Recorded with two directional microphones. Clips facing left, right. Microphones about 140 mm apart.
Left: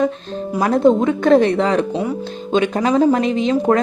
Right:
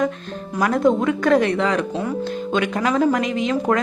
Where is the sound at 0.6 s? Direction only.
25° left (ahead or behind).